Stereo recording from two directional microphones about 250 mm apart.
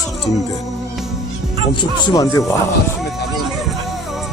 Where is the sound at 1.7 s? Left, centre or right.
Centre.